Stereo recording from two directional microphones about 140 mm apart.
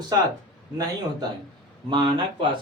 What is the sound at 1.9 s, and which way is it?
Speech, 35° right (ahead or behind).